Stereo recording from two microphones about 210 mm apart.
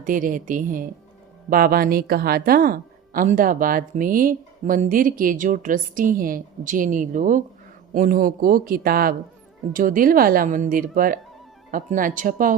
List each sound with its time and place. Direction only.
0.0 s a woman's voice: 40° right (ahead or behind)